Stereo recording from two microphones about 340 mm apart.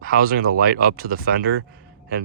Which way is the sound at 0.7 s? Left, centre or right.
Right.